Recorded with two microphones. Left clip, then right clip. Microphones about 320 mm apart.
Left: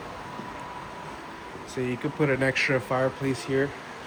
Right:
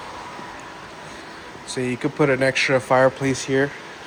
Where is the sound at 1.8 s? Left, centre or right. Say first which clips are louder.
Right 6 dB; centre.